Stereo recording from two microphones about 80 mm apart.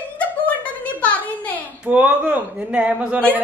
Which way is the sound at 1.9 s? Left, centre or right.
Centre.